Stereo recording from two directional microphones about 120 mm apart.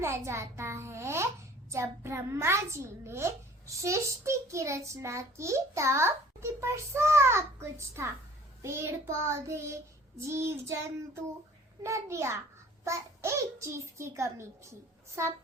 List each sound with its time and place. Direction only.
0.0 s a child's voice: 20° right (ahead or behind)